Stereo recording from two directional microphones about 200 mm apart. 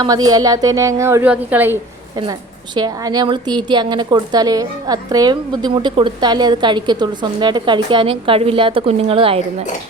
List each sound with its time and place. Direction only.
0.0 s a woman's voice: 20° right (ahead or behind)
2.7 s a woman's voice: 20° right (ahead or behind)